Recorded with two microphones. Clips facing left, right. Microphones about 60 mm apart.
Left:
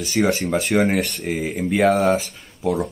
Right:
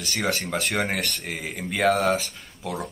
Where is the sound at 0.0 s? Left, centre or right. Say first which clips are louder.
Left 7 dB; centre.